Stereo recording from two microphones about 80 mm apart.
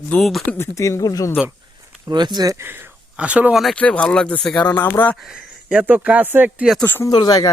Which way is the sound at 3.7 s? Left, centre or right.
Centre.